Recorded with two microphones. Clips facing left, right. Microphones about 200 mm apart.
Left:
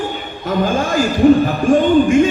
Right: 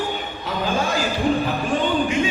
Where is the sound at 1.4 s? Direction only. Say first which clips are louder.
Left 9 dB; 45° left (ahead or behind).